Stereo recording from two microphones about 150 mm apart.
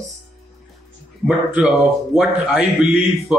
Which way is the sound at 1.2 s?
10° right (ahead or behind).